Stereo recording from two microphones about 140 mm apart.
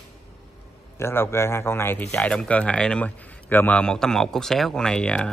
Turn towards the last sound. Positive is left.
turn(degrees=5)  # may be behind; listen again after turning